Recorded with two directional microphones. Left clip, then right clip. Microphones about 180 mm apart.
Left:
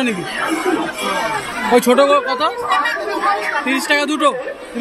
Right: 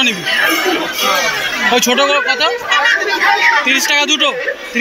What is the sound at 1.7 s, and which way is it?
Speech, 20° left (ahead or behind).